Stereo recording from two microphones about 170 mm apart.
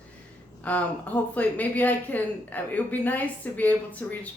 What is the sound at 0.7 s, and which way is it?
A woman's voice, 10° left (ahead or behind).